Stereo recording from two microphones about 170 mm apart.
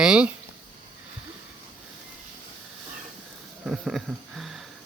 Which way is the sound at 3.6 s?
Centre (ahead or behind).